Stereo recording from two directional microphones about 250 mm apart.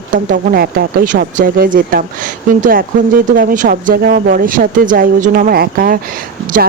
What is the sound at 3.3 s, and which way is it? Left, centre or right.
Speech, right.